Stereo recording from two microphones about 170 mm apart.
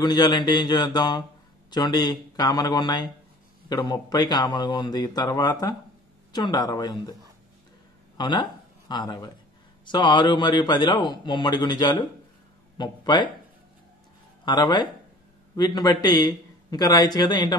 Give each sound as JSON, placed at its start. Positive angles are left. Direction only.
{"t": 0.0, "sound": "a man's voice", "side_deg": 25}
{"t": 8.2, "sound": "a man's voice", "side_deg": 25}
{"t": 14.4, "sound": "a man's voice", "side_deg": 25}